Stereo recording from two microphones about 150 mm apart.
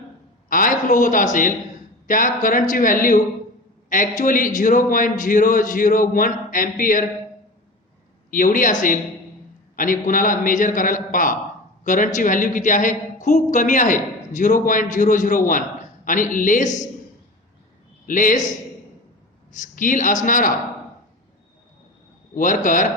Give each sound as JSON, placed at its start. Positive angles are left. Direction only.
{"t": 0.4, "sound": "a man's voice", "side_deg": 65}
{"t": 8.3, "sound": "a man's voice", "side_deg": 65}
{"t": 18.0, "sound": "a man's voice", "side_deg": 65}
{"t": 19.5, "sound": "a man's voice", "side_deg": 60}
{"t": 22.4, "sound": "a man's voice", "side_deg": 60}